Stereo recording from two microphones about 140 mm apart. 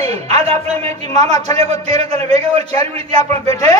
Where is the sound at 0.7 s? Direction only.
45° right (ahead or behind).